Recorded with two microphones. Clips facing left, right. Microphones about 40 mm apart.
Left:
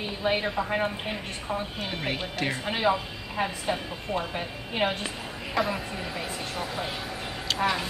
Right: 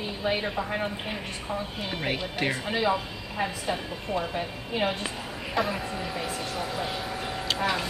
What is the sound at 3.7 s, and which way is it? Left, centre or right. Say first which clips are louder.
Speech: even; centre.